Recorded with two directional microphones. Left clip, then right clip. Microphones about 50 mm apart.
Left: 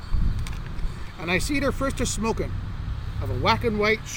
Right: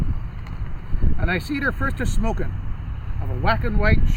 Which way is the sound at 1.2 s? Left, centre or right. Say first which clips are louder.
Even; right.